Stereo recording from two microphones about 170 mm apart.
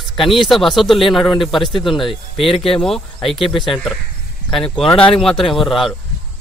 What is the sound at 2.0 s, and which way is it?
Speech, 30° left (ahead or behind).